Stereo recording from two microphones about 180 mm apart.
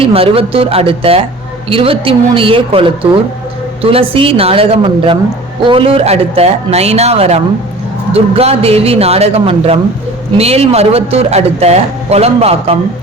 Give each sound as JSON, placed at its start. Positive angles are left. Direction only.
{"t": 0.0, "sound": "a man's voice", "side_deg": -30}